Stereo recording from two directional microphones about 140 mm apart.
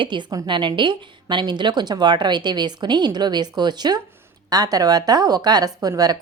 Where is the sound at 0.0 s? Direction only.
35° right (ahead or behind).